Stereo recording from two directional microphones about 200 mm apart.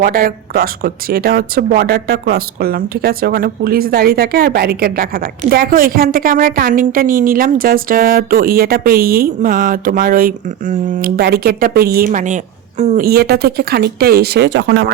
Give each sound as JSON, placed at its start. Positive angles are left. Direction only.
{"t": 0.0, "sound": "speech", "side_deg": -45}
{"t": 13.1, "sound": "speech", "side_deg": -50}